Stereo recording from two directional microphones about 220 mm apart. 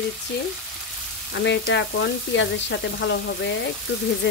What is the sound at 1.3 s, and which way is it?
Frying, 55° left (ahead or behind).